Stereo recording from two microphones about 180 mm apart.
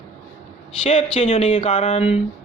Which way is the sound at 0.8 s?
40° left (ahead or behind).